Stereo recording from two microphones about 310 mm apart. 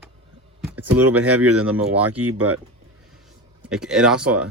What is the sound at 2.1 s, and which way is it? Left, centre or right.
Speech, right.